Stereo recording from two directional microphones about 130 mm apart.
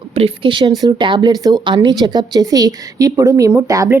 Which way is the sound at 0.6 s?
30° right (ahead or behind).